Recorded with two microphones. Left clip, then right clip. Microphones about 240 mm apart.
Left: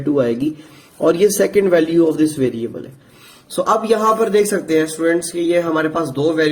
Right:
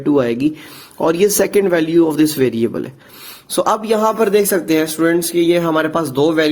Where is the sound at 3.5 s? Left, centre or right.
Right.